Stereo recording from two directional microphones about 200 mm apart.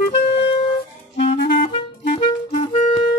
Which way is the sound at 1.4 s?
45° left (ahead or behind).